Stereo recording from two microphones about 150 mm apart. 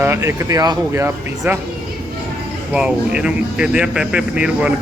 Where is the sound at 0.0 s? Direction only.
15° right (ahead or behind).